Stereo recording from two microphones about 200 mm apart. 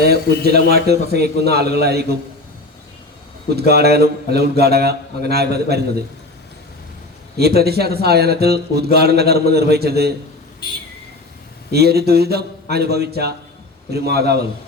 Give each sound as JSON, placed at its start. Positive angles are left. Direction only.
{"t": 0.0, "sound": "speech", "side_deg": -50}
{"t": 3.5, "sound": "speech", "side_deg": -55}
{"t": 7.3, "sound": "speech", "side_deg": -50}
{"t": 11.7, "sound": "speech", "side_deg": -55}